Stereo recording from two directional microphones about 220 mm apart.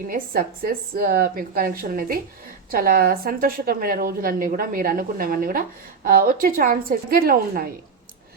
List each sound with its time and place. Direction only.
0.1 s a woman's voice: 40° right (ahead or behind)